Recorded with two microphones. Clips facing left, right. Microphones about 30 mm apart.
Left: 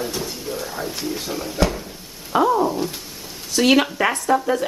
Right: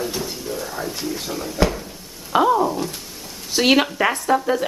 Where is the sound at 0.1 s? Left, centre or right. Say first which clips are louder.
Even; centre.